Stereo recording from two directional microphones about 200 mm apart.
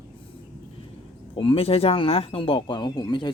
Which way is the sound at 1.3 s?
25° left (ahead or behind).